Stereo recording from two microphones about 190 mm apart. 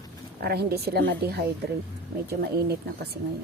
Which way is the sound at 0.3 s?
55° right (ahead or behind).